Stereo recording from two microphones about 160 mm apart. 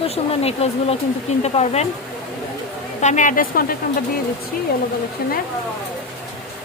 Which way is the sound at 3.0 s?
50° left (ahead or behind).